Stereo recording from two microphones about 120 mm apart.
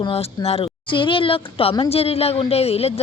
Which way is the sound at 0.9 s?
45° left (ahead or behind).